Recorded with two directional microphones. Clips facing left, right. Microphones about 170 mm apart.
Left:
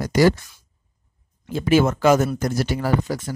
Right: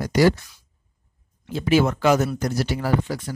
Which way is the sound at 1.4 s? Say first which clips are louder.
Left 2 dB; 50° left (ahead or behind).